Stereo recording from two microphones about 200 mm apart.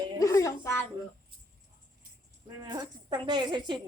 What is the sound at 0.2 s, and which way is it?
Music, 15° left (ahead or behind).